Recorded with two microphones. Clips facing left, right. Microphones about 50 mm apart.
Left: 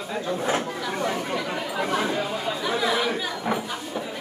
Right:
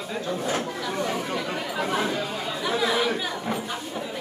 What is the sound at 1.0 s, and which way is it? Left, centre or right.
Chatter, centre.